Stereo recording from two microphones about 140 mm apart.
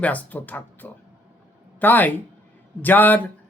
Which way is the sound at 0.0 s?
10° left (ahead or behind).